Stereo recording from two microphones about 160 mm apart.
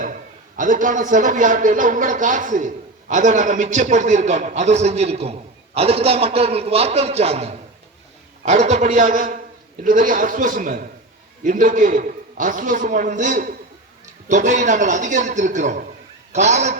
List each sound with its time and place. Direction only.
0.0 s a man's voice: 55° right (ahead or behind)